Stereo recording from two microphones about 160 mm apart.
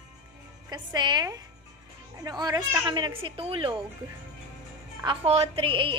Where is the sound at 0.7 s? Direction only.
25° right (ahead or behind).